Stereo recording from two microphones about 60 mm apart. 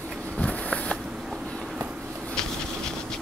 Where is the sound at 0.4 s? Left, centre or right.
Centre.